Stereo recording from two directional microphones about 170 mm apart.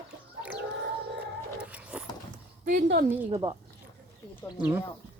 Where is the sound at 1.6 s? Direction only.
5° right (ahead or behind).